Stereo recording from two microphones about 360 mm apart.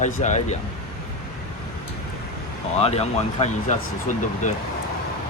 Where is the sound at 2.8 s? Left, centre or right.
Centre.